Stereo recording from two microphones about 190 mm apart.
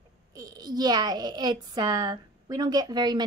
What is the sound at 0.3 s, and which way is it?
Speech, 20° right (ahead or behind).